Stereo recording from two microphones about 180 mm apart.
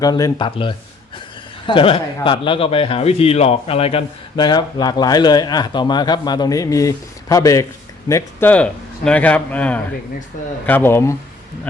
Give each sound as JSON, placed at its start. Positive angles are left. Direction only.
{"t": 0.0, "sound": "speech", "side_deg": 20}